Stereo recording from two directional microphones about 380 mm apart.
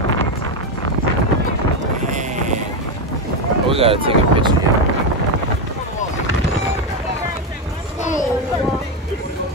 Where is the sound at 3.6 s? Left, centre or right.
Centre.